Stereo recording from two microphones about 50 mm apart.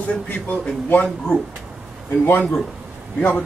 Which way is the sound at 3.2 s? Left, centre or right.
Left.